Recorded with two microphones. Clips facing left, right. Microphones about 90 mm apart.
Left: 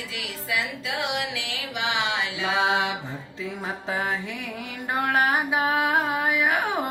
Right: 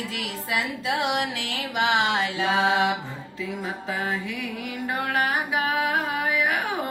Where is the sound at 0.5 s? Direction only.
40° right (ahead or behind).